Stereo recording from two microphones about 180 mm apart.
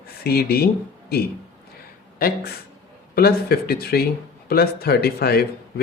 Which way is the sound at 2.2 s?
50° left (ahead or behind).